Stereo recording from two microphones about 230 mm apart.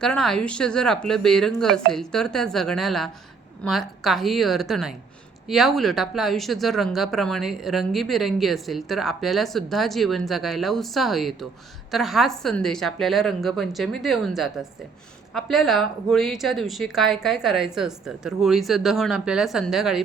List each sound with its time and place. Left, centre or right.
0.0 s speech: centre